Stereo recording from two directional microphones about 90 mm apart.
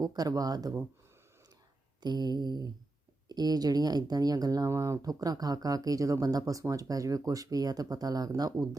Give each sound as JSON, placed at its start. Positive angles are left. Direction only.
{"t": 0.0, "sound": "speech", "side_deg": -45}
{"t": 2.0, "sound": "speech", "side_deg": -50}